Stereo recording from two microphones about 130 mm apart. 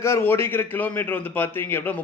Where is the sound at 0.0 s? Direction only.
20° left (ahead or behind).